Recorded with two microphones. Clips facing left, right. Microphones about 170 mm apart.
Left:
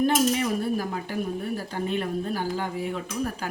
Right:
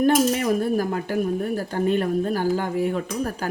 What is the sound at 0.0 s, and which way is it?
Speech, 45° right (ahead or behind).